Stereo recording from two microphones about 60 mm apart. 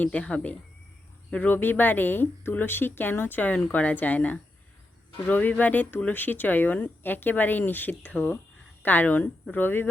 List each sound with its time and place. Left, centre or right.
0.0 s speech: centre; by 9.9 s left